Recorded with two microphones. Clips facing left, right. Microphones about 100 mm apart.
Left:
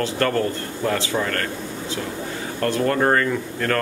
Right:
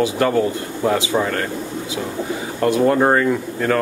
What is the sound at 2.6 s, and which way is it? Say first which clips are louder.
Speech: right 5 dB; 15° right (ahead or behind).